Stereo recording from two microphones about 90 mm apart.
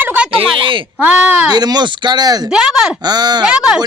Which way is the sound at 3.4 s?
10° right (ahead or behind).